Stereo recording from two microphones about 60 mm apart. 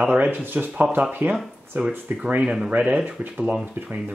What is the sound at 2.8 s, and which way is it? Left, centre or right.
Speech, centre.